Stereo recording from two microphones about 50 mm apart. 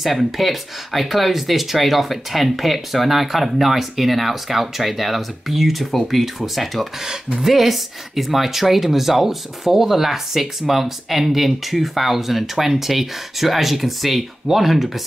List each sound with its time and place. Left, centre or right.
0.0 s speech: centre